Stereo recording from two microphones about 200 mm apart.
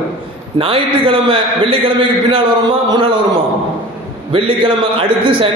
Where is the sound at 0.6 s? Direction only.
25° right (ahead or behind).